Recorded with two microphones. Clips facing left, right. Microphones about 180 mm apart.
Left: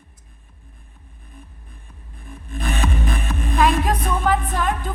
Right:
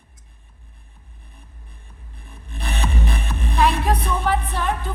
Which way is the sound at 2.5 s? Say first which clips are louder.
Left 3 dB; 45° left (ahead or behind).